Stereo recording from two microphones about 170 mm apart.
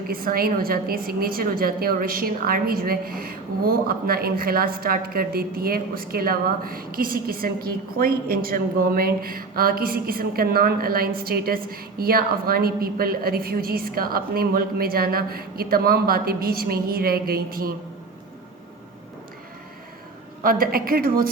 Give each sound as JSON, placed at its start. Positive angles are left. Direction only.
{"t": 0.1, "sound": "a woman's voice", "side_deg": -60}
{"t": 20.4, "sound": "a woman's voice", "side_deg": -60}